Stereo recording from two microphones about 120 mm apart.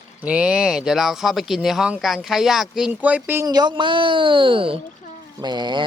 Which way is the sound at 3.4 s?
35° right (ahead or behind).